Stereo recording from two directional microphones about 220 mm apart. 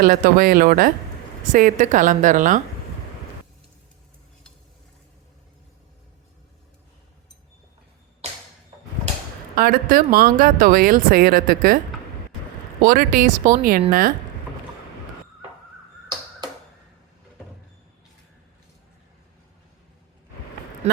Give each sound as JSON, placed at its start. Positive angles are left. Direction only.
{"t": 0.0, "sound": "speech", "side_deg": -40}
{"t": 8.2, "sound": "a sound", "side_deg": -30}
{"t": 9.6, "sound": "speech", "side_deg": -40}
{"t": 12.8, "sound": "speech", "side_deg": -40}